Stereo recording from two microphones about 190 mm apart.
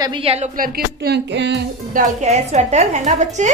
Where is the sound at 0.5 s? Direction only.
50° right (ahead or behind); by 1.6 s 70° right (ahead or behind).